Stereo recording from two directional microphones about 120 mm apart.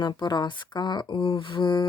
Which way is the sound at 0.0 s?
35° left (ahead or behind).